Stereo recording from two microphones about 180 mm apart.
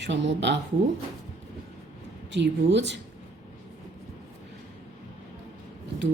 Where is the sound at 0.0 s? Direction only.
80° right.